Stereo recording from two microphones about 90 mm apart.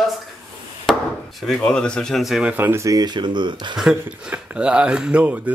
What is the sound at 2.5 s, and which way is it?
Speech, 25° right (ahead or behind).